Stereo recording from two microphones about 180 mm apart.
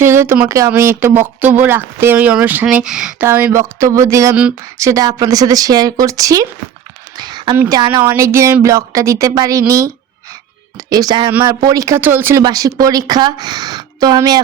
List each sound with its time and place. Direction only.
0.0 s speech: 15° right (ahead or behind)
7.2 s a sound: 25° right (ahead or behind)
7.5 s speech: 15° right (ahead or behind)